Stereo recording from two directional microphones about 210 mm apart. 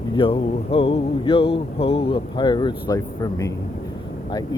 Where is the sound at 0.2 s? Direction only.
25° left (ahead or behind).